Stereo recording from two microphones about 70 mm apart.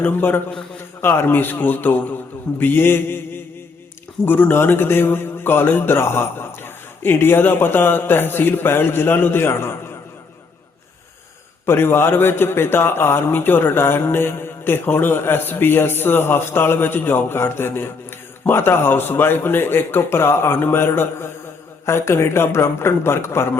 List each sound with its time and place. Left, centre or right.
0.0 s a man's voice: left
4.3 s a man's voice: left
11.6 s a man's voice: left